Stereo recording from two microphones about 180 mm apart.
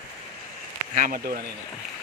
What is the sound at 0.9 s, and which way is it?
Speech, 50° right (ahead or behind).